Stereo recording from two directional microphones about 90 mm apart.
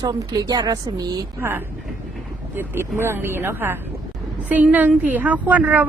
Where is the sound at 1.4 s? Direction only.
25° right (ahead or behind).